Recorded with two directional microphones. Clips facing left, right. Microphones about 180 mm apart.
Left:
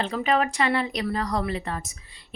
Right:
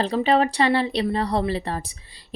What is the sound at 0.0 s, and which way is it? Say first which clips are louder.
Speech: right 4 dB; 35° right (ahead or behind).